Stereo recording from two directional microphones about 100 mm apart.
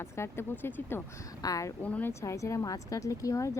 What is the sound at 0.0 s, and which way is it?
Speech, 25° left (ahead or behind).